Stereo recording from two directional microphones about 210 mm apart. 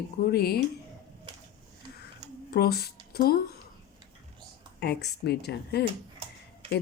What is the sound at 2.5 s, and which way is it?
Speech, 50° left (ahead or behind).